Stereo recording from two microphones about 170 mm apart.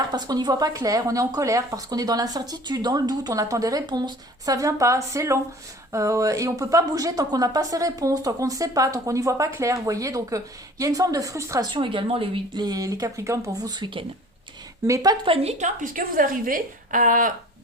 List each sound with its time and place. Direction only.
0.1 s a woman's voice: 25° right (ahead or behind); by 17.3 s 50° right (ahead or behind)